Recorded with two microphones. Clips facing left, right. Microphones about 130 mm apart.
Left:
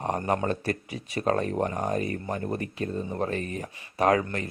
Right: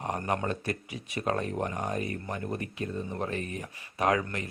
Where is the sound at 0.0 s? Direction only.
35° left (ahead or behind).